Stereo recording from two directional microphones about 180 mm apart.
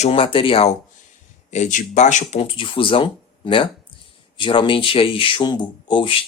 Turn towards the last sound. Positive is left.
turn(degrees=25)  # may be behind; listen again after turning